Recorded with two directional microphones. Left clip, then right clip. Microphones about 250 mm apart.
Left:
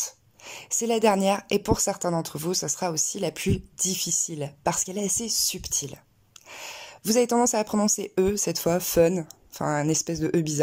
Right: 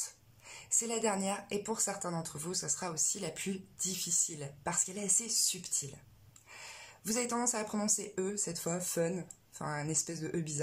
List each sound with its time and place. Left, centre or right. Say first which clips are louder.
0.0 s speech: left 11 dB; left